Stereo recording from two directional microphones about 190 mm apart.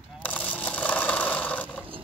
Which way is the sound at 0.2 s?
10° left (ahead or behind).